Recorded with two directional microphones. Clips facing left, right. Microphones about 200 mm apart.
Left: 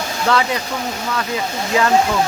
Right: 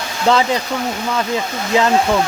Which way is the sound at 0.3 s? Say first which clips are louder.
Right 4 dB; 30° right (ahead or behind).